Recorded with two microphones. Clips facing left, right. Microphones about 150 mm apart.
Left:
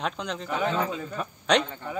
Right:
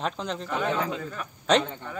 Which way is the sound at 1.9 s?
10° left (ahead or behind).